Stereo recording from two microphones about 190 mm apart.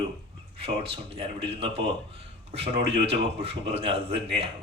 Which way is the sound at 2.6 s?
65° right (ahead or behind).